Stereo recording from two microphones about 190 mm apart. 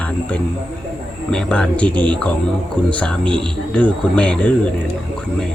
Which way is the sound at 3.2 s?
25° right (ahead or behind).